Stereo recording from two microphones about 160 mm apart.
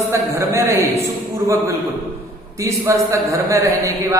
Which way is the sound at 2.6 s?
20° right (ahead or behind).